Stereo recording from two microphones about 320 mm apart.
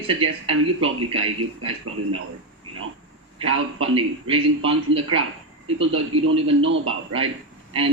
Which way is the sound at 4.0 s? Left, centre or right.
Centre.